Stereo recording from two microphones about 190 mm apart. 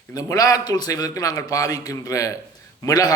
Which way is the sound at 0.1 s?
20° left (ahead or behind).